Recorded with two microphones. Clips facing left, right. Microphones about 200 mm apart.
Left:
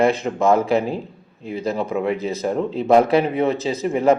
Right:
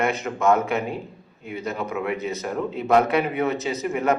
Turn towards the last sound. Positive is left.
turn(degrees=30)  # may be behind; listen again after turning